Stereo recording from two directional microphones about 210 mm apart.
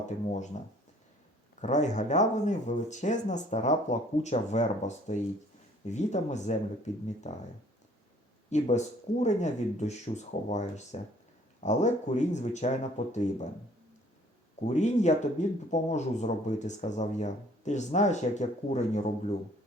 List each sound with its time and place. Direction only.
0.5 s speech: 35° left (ahead or behind)
8.4 s speech: 35° left (ahead or behind)
14.7 s speech: 35° left (ahead or behind)